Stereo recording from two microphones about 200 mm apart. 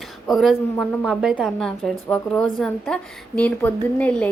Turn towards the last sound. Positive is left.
turn(degrees=5)  # may be behind; listen again after turning